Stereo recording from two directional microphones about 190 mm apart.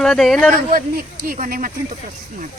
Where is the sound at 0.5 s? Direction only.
50° right (ahead or behind).